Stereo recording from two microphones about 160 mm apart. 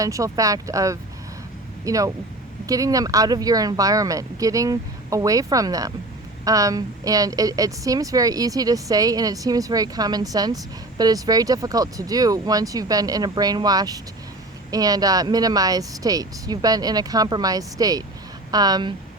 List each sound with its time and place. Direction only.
0.0 s a woman's voice: 20° right (ahead or behind)